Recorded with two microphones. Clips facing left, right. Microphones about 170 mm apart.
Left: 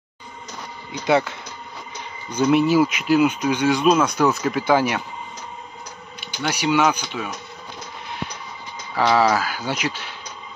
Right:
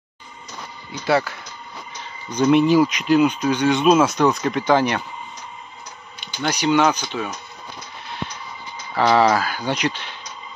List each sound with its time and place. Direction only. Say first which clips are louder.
1.0 s speech: left 1 dB; 20° left (ahead or behind)
2.3 s speech: right 2 dB; 5° left (ahead or behind)
6.4 s speech: right 2 dB; 10° left (ahead or behind)
8.9 s speech: right 2 dB; 5° left (ahead or behind)